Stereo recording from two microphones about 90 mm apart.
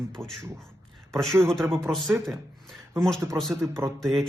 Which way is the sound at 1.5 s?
5° left (ahead or behind).